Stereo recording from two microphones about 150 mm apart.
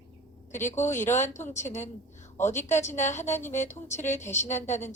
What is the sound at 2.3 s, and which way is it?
A woman's voice, 15° left (ahead or behind).